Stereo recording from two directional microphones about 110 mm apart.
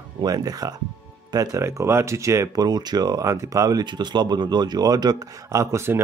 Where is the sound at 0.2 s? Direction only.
35° right (ahead or behind).